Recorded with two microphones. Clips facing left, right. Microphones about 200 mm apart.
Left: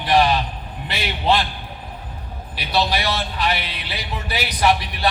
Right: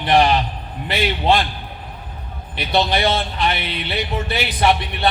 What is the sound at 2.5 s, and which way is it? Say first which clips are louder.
A man's voice: right 3 dB; 25° right (ahead or behind).